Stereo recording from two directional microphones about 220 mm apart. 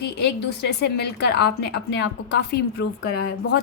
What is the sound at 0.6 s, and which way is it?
Speech, 50° left (ahead or behind).